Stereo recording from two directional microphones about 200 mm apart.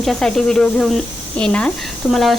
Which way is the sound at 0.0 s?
Centre (ahead or behind).